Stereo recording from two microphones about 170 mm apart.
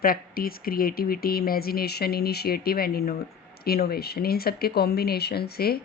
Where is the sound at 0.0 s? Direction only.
60° left (ahead or behind).